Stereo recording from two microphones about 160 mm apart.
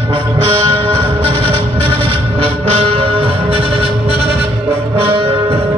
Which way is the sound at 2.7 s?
35° right (ahead or behind).